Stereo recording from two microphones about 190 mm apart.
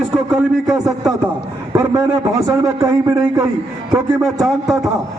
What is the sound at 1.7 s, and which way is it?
A man's voice, 15° right (ahead or behind).